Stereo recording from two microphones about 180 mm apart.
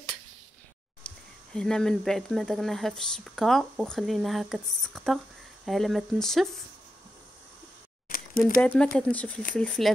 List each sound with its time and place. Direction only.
1.0 s speech: 5° left (ahead or behind)
8.1 s a sound: 50° left (ahead or behind)
8.5 s speech: 5° left (ahead or behind)